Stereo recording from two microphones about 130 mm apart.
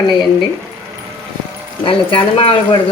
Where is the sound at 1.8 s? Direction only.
40° left (ahead or behind).